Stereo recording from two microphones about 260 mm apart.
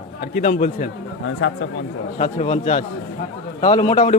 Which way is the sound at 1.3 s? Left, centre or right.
Left.